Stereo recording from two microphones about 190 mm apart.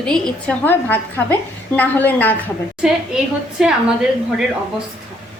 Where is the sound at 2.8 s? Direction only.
5° right (ahead or behind).